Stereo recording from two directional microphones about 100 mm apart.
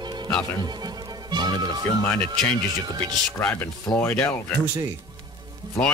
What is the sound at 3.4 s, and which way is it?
Speech, 20° left (ahead or behind).